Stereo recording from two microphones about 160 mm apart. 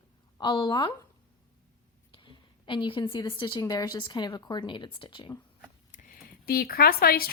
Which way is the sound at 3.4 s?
25° left (ahead or behind).